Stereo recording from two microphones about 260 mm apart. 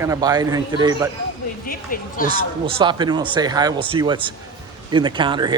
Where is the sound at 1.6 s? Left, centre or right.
Left.